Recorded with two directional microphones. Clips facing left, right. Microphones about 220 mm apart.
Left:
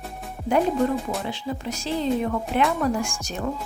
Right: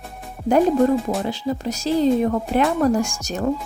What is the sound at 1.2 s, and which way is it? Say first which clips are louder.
Speech: right 5 dB; 40° right (ahead or behind).